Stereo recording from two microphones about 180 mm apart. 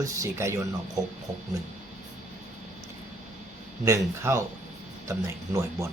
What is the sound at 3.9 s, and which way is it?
Speech, 15° right (ahead or behind).